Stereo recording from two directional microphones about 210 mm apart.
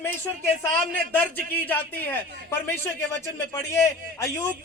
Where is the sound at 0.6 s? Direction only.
10° left (ahead or behind).